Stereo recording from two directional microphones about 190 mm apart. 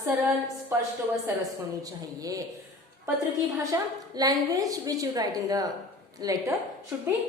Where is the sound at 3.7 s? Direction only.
20° right (ahead or behind).